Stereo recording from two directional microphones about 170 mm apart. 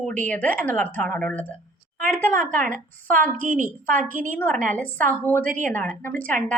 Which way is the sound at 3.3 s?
50° right (ahead or behind).